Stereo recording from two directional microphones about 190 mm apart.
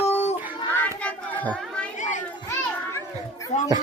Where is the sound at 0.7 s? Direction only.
10° left (ahead or behind).